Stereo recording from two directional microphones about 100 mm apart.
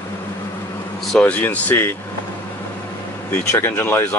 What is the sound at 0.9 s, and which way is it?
Speech, 10° left (ahead or behind).